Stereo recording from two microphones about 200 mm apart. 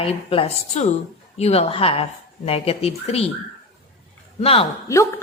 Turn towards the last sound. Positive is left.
turn(degrees=15)  # may be behind; listen again after turning